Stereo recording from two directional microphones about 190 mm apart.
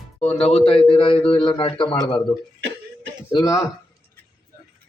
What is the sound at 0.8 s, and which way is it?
Speech, 25° left (ahead or behind).